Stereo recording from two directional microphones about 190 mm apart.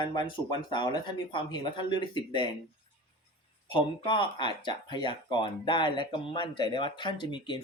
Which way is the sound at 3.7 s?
25° left (ahead or behind).